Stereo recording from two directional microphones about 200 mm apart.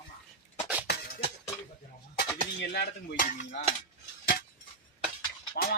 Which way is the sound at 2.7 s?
45° left (ahead or behind).